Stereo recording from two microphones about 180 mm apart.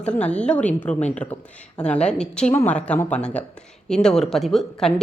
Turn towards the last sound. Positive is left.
turn(degrees=0)  # may be behind; listen again after turning